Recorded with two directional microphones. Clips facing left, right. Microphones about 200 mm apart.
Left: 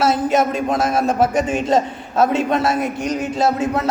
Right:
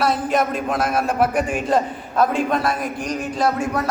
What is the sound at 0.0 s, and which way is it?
A man's voice, 25° left (ahead or behind).